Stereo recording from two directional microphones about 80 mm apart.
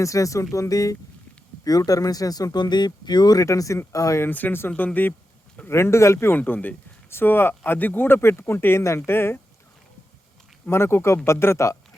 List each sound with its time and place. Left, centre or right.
0.0 s speech: left
3.4 s speech: left
4.2 s speech: left
6.3 s speech: left
10.7 s speech: left